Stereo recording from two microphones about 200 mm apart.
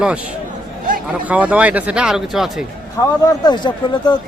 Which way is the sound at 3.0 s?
15° left (ahead or behind).